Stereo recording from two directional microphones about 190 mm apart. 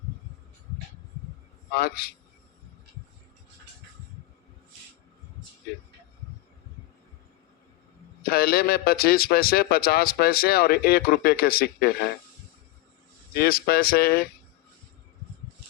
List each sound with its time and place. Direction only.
1.7 s a man's voice: 55° left (ahead or behind)
8.2 s a man's voice: 50° left (ahead or behind)
13.3 s a man's voice: 55° left (ahead or behind)